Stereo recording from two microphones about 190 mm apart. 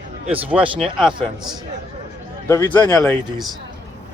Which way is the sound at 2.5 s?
15° left (ahead or behind).